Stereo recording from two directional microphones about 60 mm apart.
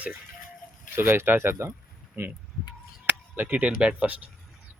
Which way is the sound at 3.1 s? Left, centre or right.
Right.